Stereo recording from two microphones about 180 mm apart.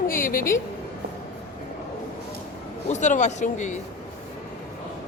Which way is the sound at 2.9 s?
40° left (ahead or behind).